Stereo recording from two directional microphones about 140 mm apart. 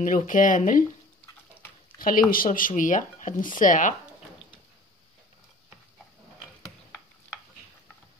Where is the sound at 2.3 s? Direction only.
85° left.